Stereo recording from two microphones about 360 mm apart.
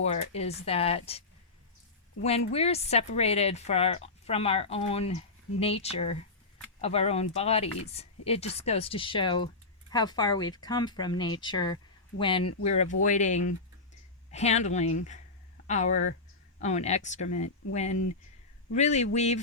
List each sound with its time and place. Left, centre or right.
0.0 s a woman's voice: centre
18.7 s speech: centre